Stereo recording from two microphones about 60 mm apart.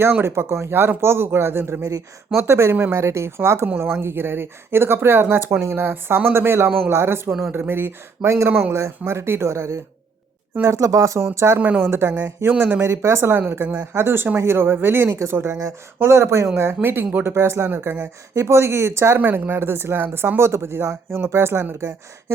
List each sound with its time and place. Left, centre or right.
0.0 s speech: right
10.7 s speech: right
11.3 s speech: right
12.8 s speech: right
17.7 s speech: right
18.3 s speech: right